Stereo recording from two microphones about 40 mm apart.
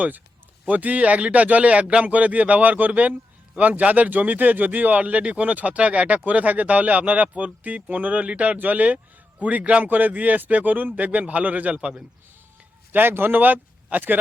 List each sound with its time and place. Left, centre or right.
0.7 s speech: right
11.7 s a man's voice: right
12.9 s speech: right